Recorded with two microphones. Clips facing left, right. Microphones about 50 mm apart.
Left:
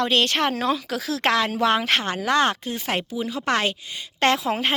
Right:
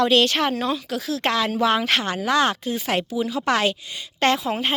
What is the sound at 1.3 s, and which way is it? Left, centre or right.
Speech, left.